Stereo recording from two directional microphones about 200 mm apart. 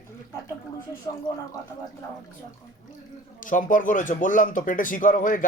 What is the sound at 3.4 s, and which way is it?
Speech, 40° left (ahead or behind).